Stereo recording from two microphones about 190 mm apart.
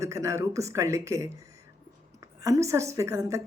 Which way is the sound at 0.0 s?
15° right (ahead or behind).